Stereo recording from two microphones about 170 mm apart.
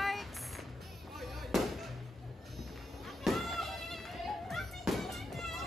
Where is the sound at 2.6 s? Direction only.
Centre (ahead or behind).